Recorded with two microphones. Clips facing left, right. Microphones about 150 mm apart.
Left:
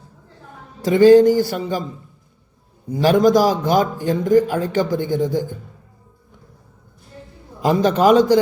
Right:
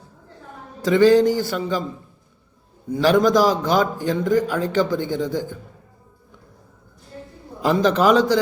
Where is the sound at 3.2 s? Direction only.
45° left (ahead or behind).